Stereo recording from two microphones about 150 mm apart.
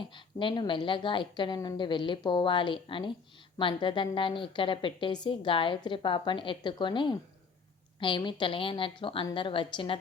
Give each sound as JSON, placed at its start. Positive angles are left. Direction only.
{"t": 0.0, "sound": "a woman's voice", "side_deg": 35}